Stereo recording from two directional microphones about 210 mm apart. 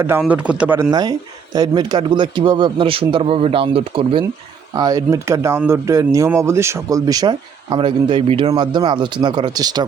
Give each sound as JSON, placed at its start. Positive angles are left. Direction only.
{"t": 0.0, "sound": "a man's voice", "side_deg": -10}